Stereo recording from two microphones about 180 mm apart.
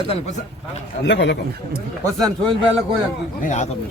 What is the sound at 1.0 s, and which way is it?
Speech, 75° left (ahead or behind).